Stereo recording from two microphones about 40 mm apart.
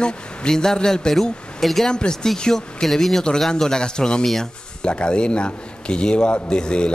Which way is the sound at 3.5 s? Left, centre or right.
Centre.